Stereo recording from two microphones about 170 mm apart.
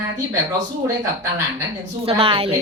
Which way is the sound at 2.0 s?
35° right (ahead or behind).